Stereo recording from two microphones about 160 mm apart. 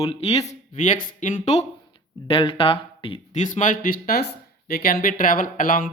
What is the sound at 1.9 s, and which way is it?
Speech, 35° left (ahead or behind).